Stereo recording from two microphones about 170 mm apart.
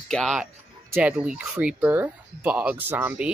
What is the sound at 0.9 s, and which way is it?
Speech, 10° right (ahead or behind).